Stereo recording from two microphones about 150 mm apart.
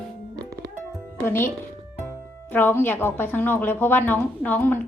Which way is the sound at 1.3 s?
15° left (ahead or behind).